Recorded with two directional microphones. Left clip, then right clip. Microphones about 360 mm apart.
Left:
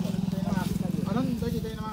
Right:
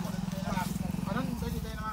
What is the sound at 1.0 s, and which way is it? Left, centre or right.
Vehicle, centre.